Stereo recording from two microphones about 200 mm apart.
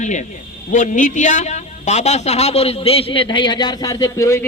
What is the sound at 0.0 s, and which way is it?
A man's voice, 35° left (ahead or behind).